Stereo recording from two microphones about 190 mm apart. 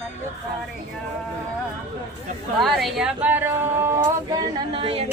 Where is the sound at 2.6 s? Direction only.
Centre (ahead or behind).